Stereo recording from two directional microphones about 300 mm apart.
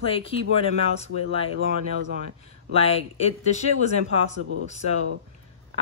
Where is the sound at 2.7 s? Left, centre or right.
Centre.